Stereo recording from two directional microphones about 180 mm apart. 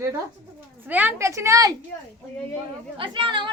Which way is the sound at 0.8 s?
10° right (ahead or behind).